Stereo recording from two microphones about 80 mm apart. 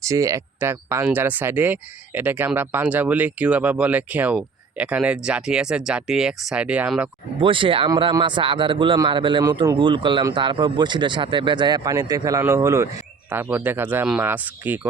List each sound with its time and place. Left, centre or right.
0.0 s speech: right; by 6.9 s centre
7.4 s a man's voice: right
11.9 s a man's voice: right
13.3 s speech: right